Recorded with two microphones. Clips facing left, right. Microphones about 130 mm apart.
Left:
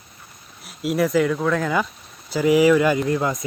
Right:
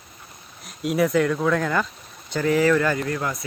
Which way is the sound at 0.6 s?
5° left (ahead or behind).